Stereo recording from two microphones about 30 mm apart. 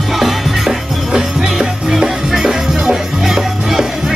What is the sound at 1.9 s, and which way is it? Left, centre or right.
Music, centre.